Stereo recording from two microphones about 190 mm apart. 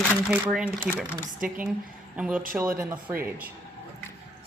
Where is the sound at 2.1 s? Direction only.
5° right (ahead or behind).